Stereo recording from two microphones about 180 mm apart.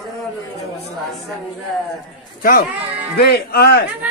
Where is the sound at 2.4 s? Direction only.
55° left (ahead or behind).